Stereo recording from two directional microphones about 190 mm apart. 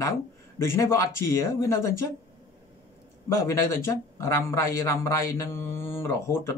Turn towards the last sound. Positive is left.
turn(degrees=15)  # may be behind; listen again after turning